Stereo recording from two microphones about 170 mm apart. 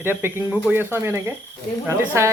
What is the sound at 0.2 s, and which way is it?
Speech, 15° right (ahead or behind).